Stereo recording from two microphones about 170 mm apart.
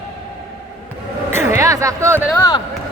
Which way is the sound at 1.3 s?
15° right (ahead or behind).